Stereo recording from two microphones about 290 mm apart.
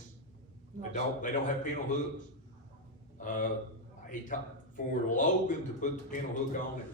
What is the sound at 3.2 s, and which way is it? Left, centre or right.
Speech, left.